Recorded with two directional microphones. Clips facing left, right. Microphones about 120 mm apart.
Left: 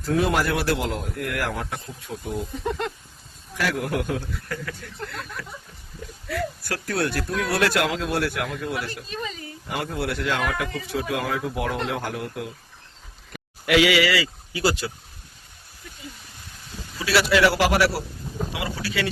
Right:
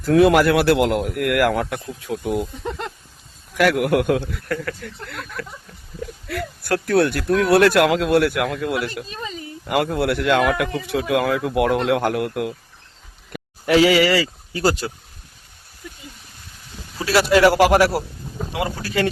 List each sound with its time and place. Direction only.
0.0 s speech: 70° right (ahead or behind); by 2.4 s 90° right
3.6 s speech: 70° right (ahead or behind)
13.7 s speech: 40° right (ahead or behind)
17.1 s a man's voice: 45° right (ahead or behind)